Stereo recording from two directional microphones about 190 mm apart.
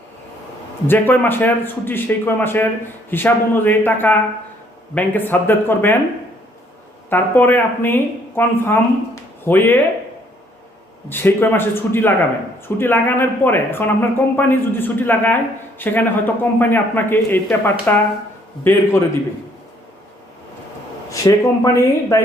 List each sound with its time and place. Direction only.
0.9 s speech: 10° left (ahead or behind)
7.1 s a woman's voice: 10° left (ahead or behind)
11.1 s speech: 10° left (ahead or behind)
21.1 s speech: 15° left (ahead or behind)